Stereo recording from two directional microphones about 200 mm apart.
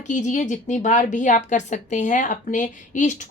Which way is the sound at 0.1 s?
40° left (ahead or behind).